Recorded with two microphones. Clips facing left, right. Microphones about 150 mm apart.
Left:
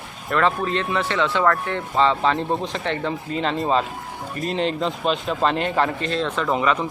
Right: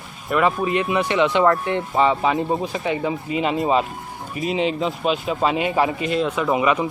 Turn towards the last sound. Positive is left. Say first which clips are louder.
# right 2 dB
turn(degrees=-10)  # may be behind; listen again after turning